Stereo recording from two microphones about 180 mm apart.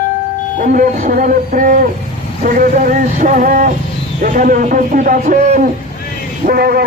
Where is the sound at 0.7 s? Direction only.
50° right (ahead or behind).